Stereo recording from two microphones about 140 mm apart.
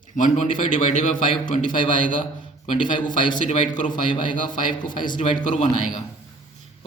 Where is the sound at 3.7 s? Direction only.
65° left (ahead or behind).